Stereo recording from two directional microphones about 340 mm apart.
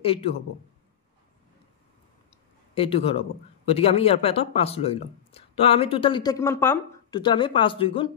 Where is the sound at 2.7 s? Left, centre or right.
Centre.